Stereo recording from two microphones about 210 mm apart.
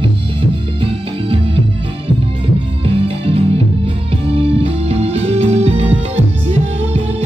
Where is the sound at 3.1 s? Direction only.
25° right (ahead or behind).